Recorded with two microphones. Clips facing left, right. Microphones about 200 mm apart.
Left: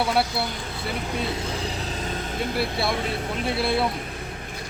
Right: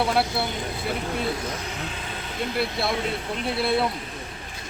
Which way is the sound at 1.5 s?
30° left (ahead or behind).